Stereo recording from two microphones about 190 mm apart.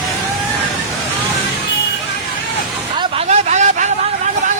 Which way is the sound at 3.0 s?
35° right (ahead or behind).